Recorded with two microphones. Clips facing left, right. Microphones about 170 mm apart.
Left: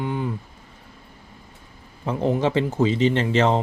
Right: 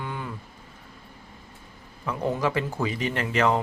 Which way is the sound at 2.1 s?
25° left (ahead or behind).